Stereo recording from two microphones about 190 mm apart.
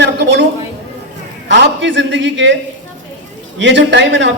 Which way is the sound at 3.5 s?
75° right (ahead or behind).